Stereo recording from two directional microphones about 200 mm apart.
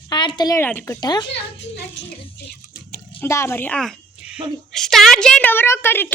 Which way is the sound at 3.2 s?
15° left (ahead or behind).